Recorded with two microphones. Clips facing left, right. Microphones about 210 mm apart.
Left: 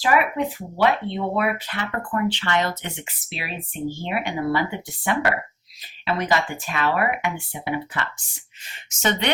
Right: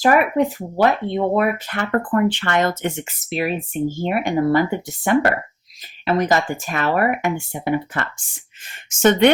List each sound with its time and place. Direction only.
0.0 s speech: 45° right (ahead or behind)